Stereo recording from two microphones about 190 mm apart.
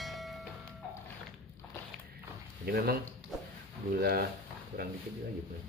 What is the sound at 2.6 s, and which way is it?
Speech, 55° right (ahead or behind).